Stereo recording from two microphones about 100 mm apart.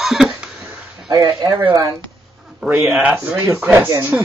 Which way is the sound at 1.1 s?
35° right (ahead or behind).